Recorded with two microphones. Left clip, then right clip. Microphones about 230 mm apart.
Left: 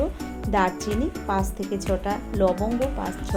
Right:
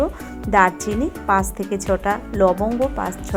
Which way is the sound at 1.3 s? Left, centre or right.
Right.